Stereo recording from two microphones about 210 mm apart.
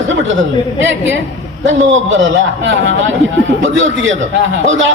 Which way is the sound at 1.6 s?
65° right (ahead or behind).